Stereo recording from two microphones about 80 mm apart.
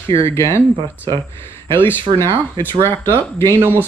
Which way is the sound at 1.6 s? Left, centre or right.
Left.